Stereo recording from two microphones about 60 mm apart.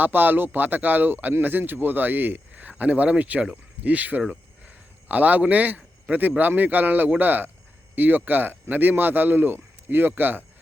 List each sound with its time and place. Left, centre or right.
0.0 s a man's voice: right